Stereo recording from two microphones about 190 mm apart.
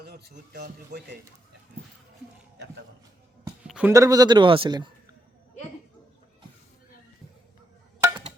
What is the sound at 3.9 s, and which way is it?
Speech, 20° right (ahead or behind).